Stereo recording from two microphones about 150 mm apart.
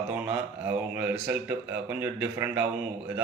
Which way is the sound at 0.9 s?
10° right (ahead or behind).